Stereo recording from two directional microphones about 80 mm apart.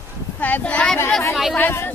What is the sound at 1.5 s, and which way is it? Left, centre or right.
Speech, left.